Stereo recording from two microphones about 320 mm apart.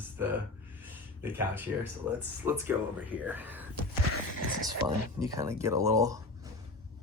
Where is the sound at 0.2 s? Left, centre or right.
Centre.